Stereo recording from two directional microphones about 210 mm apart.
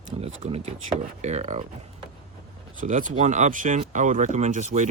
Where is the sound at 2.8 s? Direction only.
40° right (ahead or behind).